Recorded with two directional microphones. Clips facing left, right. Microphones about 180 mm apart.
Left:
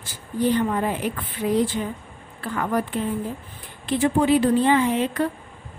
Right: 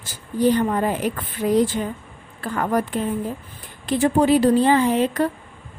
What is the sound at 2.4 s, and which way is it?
A woman's voice, 45° right (ahead or behind).